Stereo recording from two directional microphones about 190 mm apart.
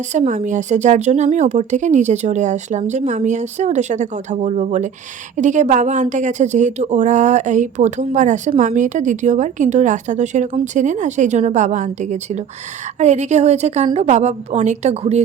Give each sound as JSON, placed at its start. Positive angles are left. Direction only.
{"t": 0.1, "sound": "a woman's voice", "side_deg": -40}